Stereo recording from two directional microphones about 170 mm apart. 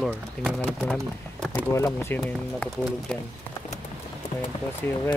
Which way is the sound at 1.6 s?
15° left (ahead or behind).